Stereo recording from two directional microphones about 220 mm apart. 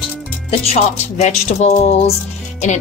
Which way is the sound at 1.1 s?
30° left (ahead or behind).